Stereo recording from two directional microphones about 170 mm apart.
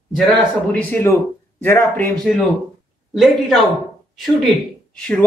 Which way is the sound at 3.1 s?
Centre (ahead or behind).